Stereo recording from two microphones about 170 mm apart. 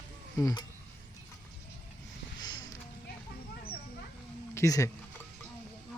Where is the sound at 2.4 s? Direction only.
25° left (ahead or behind).